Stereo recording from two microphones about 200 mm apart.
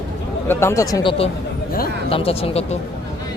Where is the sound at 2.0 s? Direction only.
30° left (ahead or behind).